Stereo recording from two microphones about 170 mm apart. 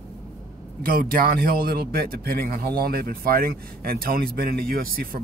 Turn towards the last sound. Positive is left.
turn(degrees=-60)  # may be behind; listen again after turning